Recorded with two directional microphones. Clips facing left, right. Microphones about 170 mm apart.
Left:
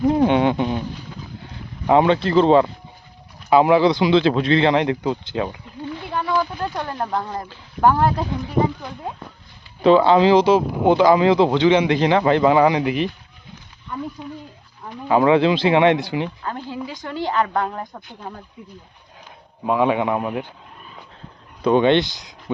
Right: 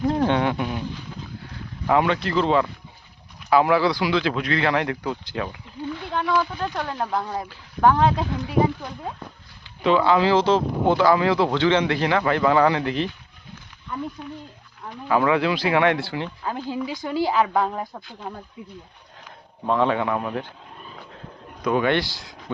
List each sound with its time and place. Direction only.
0.0 s a sound: 15° left (ahead or behind)
1.9 s speech: 25° left (ahead or behind)
3.5 s speech: 20° left (ahead or behind)
6.1 s a man's voice: centre (ahead or behind)
9.8 s speech: 30° left (ahead or behind); by 13.1 s 15° left (ahead or behind)
14.2 s speech: 20° left (ahead or behind)
16.4 s speech: 10° right (ahead or behind)
19.6 s a man's voice: 10° left (ahead or behind)
21.6 s speech: 30° left (ahead or behind)